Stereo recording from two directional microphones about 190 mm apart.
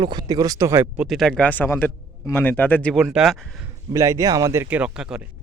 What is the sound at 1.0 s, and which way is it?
A man's voice, centre (ahead or behind).